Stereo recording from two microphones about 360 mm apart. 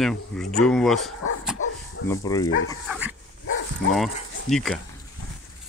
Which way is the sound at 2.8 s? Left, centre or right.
Centre.